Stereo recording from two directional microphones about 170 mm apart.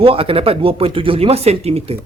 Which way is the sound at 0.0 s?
30° right (ahead or behind).